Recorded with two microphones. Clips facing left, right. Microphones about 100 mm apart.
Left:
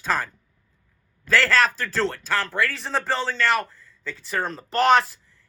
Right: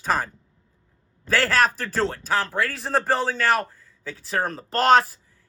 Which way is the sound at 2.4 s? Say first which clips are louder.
Even; 10° right (ahead or behind).